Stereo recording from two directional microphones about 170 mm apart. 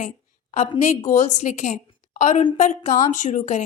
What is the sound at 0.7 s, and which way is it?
A woman's voice, 45° left (ahead or behind).